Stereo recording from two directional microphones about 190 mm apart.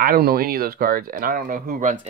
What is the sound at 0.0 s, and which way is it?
Speech, 50° right (ahead or behind).